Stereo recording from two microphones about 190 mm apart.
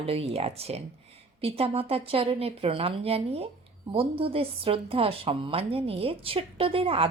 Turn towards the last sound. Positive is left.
turn(degrees=-30)  # may be behind; listen again after turning